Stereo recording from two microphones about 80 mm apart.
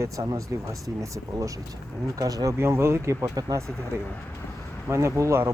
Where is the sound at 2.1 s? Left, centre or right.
Right.